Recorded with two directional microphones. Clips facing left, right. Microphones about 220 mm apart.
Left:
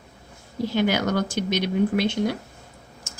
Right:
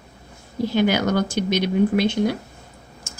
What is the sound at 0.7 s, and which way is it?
Speech, 15° right (ahead or behind).